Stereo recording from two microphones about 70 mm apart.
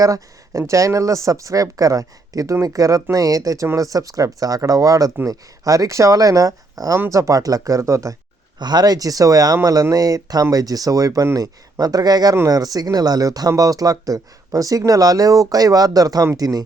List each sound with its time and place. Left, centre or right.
0.0 s speech: right
8.5 s speech: right